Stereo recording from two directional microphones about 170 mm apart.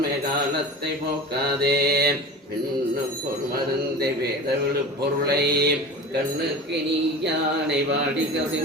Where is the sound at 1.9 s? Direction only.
70° right (ahead or behind).